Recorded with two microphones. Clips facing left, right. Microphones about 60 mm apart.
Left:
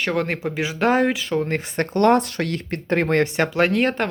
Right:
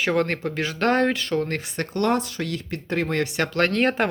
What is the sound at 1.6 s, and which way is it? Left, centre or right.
Speech, left.